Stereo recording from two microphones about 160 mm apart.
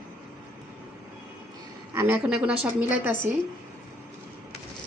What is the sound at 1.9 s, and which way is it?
Speech, 15° right (ahead or behind).